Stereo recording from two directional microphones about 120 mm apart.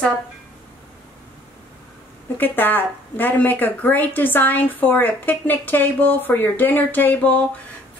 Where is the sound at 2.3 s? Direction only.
15° left (ahead or behind).